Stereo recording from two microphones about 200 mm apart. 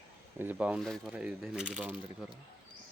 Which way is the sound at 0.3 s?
10° right (ahead or behind).